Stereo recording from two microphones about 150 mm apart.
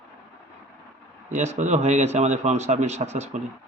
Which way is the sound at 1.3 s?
50° right (ahead or behind).